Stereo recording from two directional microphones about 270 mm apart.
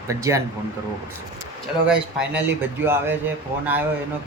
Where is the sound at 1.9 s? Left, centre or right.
Centre.